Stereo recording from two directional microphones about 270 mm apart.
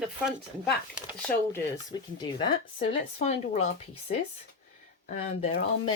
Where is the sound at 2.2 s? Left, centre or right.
Centre.